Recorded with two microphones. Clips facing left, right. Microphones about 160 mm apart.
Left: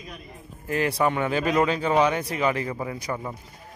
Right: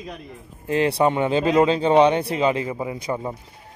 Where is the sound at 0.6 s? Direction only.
25° right (ahead or behind).